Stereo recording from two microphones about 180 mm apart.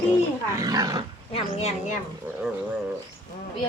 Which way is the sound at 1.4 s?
35° left (ahead or behind).